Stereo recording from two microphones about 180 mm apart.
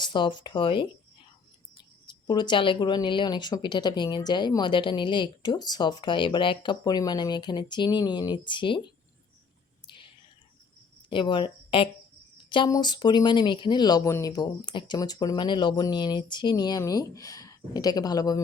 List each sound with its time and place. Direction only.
0.0 s speech: 25° left (ahead or behind)
2.0 s speech: 25° left (ahead or behind)
11.1 s speech: 25° left (ahead or behind)